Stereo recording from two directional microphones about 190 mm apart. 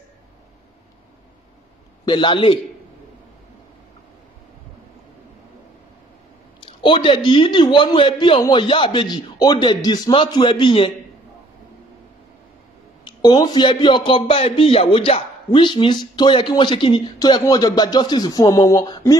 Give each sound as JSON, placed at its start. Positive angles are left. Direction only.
{"t": 2.0, "sound": "a man's voice", "side_deg": 25}
{"t": 6.6, "sound": "a man's voice", "side_deg": 25}
{"t": 13.0, "sound": "a man's voice", "side_deg": 20}